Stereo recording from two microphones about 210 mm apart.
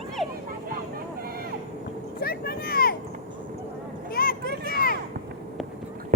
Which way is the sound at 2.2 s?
45° left (ahead or behind).